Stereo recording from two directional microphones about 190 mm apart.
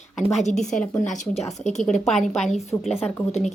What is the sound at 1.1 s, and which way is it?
Speech, 40° left (ahead or behind).